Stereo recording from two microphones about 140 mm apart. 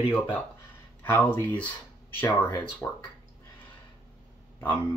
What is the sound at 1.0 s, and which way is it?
Speech, 10° left (ahead or behind).